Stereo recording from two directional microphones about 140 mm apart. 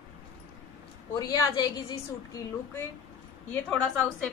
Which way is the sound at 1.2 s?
30° left (ahead or behind).